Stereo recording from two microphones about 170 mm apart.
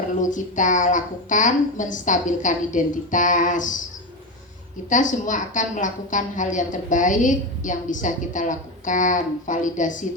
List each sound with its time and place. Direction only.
0.2 s a woman's voice: 50° left (ahead or behind)
4.9 s a woman's voice: 50° left (ahead or behind)